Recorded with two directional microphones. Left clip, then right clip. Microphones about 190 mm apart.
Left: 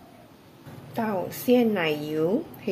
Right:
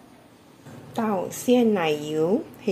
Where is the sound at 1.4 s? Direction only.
15° right (ahead or behind).